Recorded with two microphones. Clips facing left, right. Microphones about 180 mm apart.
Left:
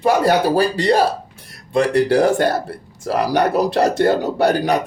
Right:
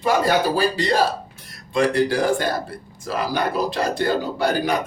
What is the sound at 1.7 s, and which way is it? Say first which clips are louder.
A man's voice: left 3 dB; 65° left (ahead or behind).